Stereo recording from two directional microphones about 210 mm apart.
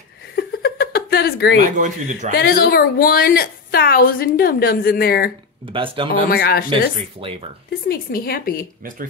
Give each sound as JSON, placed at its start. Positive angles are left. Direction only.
{"t": 0.4, "sound": "laughter", "side_deg": 50}
{"t": 1.6, "sound": "speech", "side_deg": -35}
{"t": 2.3, "sound": "a woman's voice", "side_deg": 45}
{"t": 5.7, "sound": "speech", "side_deg": -25}
{"t": 6.3, "sound": "a woman's voice", "side_deg": 45}
{"t": 7.2, "sound": "speech", "side_deg": -25}
{"t": 7.9, "sound": "a woman's voice", "side_deg": 45}